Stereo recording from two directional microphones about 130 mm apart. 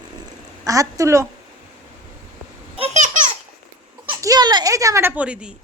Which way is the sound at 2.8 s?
60° right (ahead or behind).